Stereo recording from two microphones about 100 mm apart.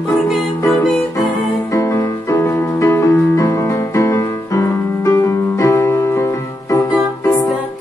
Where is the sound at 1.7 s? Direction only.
30° left (ahead or behind).